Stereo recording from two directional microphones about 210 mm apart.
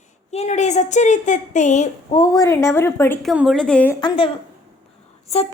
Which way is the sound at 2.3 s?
15° left (ahead or behind).